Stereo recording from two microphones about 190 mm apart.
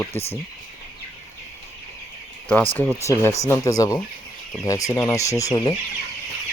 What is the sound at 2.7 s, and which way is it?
Speech, 10° left (ahead or behind).